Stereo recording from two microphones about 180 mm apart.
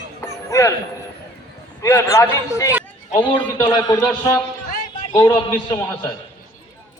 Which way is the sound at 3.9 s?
10° left (ahead or behind).